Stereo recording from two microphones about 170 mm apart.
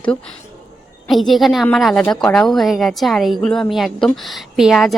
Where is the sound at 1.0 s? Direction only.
Centre (ahead or behind).